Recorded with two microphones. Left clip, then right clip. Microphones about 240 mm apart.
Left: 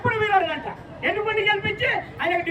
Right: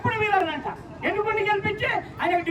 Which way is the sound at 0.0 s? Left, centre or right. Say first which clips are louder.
Left 2 dB; centre.